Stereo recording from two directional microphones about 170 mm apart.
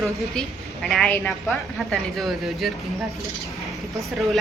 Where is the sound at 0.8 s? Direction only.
5° left (ahead or behind).